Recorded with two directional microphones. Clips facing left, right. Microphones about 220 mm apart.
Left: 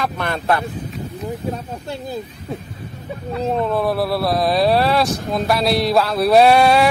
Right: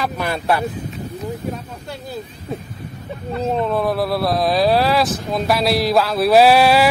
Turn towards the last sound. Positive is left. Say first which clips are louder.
# even
turn(degrees=-5)  # may be behind; listen again after turning